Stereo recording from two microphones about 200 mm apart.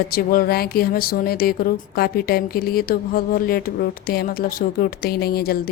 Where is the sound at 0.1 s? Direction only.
50° left (ahead or behind).